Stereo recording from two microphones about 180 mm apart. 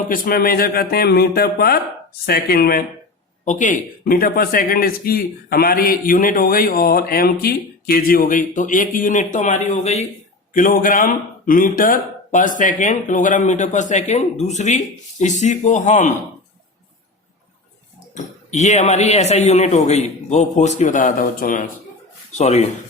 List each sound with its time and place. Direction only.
0.1 s speech: 55° left (ahead or behind)
3.4 s speech: 45° left (ahead or behind)
10.5 s speech: 50° left (ahead or behind)
18.1 s speech: 40° left (ahead or behind)